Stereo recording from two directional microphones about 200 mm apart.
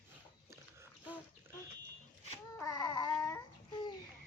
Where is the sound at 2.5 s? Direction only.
15° left (ahead or behind).